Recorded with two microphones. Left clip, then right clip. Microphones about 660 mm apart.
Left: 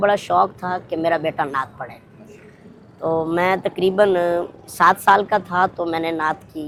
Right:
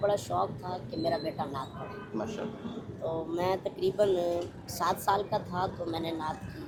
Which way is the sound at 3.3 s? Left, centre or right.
Left.